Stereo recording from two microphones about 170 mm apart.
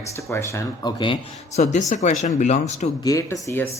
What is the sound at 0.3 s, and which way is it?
Speech, 15° left (ahead or behind).